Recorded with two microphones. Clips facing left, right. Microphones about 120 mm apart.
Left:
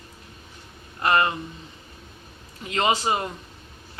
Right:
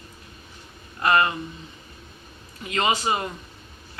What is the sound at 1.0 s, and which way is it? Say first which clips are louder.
Speech: right 1 dB; 30° left (ahead or behind).